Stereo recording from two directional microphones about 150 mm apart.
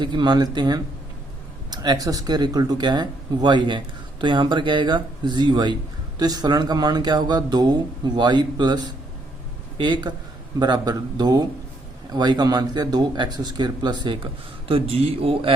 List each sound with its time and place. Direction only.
0.0 s speech: 30° right (ahead or behind)